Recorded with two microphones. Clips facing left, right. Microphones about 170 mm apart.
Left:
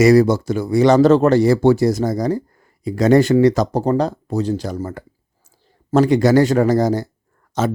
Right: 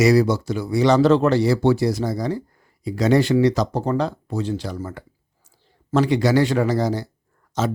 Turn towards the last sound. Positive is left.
turn(degrees=55)  # may be behind; listen again after turning